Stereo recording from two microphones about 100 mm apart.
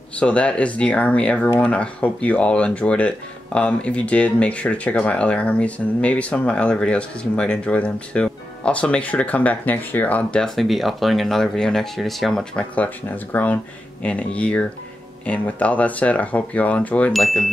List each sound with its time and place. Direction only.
0.2 s speech: 10° left (ahead or behind)
12.7 s speech: 15° left (ahead or behind)
17.1 s speech: centre (ahead or behind)